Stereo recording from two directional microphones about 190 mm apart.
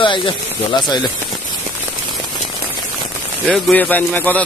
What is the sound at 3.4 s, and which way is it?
Speech, 5° left (ahead or behind).